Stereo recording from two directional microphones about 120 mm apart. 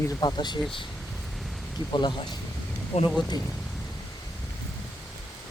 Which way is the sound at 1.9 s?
40° left (ahead or behind).